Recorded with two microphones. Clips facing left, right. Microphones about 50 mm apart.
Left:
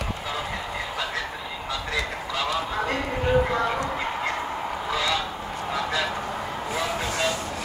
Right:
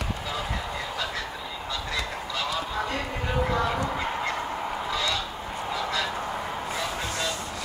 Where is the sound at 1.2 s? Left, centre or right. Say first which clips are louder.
Left 2 dB; centre.